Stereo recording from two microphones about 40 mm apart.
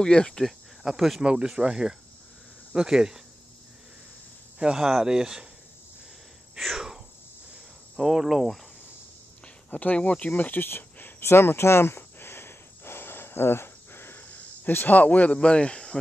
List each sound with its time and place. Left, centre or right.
0.0 s speech: centre
0.3 s speech: centre
0.8 s speech: centre
1.2 s speech: right
4.6 s speech: centre
8.0 s speech: centre
9.7 s speech: left
10.4 s speech: left
10.8 s a sound: left
14.2 s cricket: left
14.9 s speech: left
15.3 s speech: left